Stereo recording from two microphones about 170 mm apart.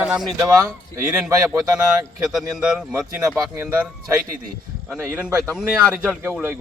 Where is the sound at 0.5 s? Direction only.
15° right (ahead or behind).